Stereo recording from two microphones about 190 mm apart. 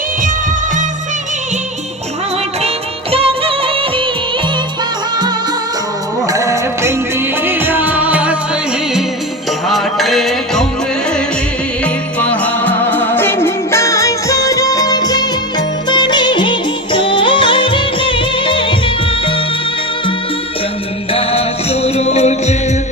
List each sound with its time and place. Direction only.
2.6 s music of bollywood: 30° right (ahead or behind)
6.2 s music: 15° right (ahead or behind)
9.6 s music: centre (ahead or behind)
12.2 s music: 10° left (ahead or behind); by 18.8 s 25° left (ahead or behind)
21.1 s music: 30° left (ahead or behind)